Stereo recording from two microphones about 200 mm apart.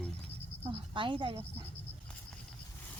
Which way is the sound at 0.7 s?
25° right (ahead or behind).